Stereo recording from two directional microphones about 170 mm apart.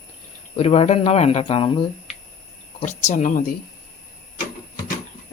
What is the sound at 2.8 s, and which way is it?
Speech, 45° left (ahead or behind).